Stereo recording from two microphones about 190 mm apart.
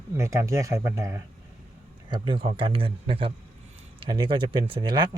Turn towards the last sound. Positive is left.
turn(degrees=-25)  # may be behind; listen again after turning